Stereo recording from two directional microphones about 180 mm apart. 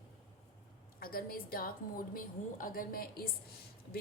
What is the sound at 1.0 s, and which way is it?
A woman's voice, 55° left (ahead or behind).